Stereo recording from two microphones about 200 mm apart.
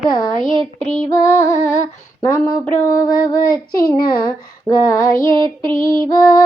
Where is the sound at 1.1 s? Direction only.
15° left (ahead or behind).